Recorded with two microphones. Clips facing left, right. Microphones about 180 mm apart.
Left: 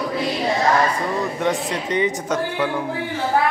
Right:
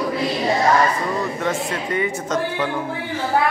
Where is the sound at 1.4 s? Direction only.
15° left (ahead or behind).